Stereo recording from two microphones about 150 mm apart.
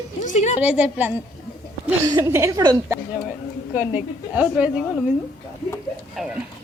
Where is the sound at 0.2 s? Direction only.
50° left (ahead or behind).